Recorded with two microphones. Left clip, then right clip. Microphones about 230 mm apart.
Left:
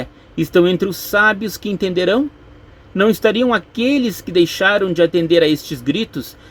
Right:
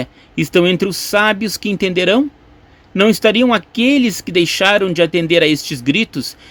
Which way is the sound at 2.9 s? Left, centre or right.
Right.